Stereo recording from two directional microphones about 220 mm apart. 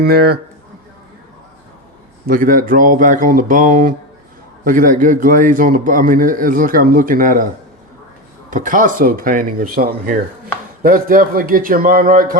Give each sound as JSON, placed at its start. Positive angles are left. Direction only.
{"t": 0.0, "sound": "speech", "side_deg": -45}
{"t": 2.2, "sound": "a man's voice", "side_deg": -40}
{"t": 8.4, "sound": "a man's voice", "side_deg": -35}